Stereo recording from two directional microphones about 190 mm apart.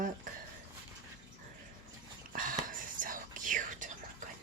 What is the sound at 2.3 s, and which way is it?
Whispering, 45° right (ahead or behind).